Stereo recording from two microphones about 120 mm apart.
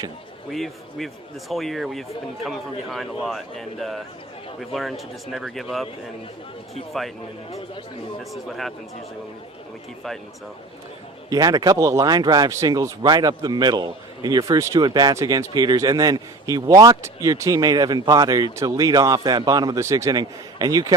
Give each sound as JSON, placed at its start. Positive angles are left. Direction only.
{"t": 0.5, "sound": "speech", "side_deg": 0}
{"t": 8.2, "sound": "speech", "side_deg": 0}
{"t": 11.3, "sound": "speech", "side_deg": -30}